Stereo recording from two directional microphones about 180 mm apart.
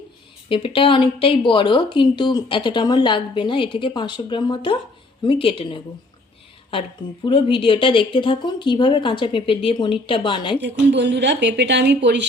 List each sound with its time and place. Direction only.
0.4 s speech: 30° left (ahead or behind)
7.3 s speech: 30° left (ahead or behind)
10.6 s speech: 70° right (ahead or behind)